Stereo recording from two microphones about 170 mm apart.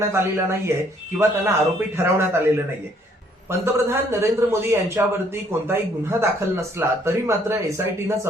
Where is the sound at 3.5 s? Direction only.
15° right (ahead or behind).